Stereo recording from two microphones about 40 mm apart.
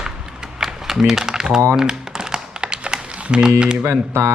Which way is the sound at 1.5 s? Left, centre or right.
Centre.